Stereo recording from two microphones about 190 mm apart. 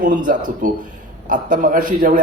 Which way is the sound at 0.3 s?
45° right (ahead or behind).